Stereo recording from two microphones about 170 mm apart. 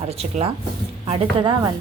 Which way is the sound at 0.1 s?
40° right (ahead or behind).